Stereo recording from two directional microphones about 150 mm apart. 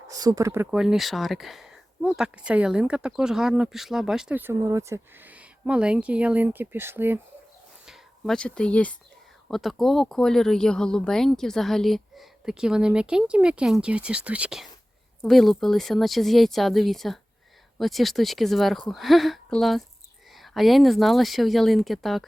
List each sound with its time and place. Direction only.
0.1 s speech: 25° right (ahead or behind)
0.7 s speech: 5° right (ahead or behind)
7.9 s speech: centre (ahead or behind)